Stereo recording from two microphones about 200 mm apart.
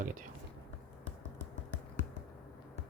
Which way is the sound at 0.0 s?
40° right (ahead or behind).